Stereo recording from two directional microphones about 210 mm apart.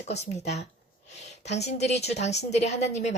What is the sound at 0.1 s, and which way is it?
A woman's voice, 30° left (ahead or behind).